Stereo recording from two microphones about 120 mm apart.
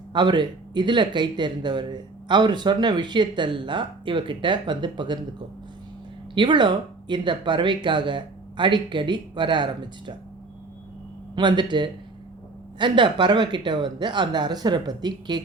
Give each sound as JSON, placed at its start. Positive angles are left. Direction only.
{"t": 0.1, "sound": "speech", "side_deg": -40}
{"t": 6.3, "sound": "speech", "side_deg": -40}
{"t": 11.3, "sound": "speech", "side_deg": -40}